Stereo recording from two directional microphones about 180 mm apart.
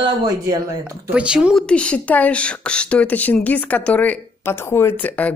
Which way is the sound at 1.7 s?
5° left (ahead or behind).